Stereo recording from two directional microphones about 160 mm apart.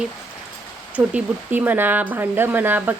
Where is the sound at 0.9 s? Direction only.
10° right (ahead or behind).